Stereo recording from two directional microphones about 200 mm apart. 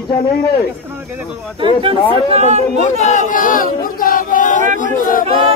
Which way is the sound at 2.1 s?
30° right (ahead or behind).